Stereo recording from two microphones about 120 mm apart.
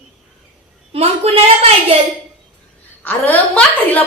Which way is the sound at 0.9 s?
55° right (ahead or behind).